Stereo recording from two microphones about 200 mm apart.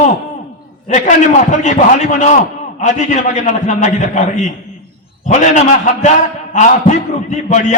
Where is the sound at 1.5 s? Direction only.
35° left (ahead or behind).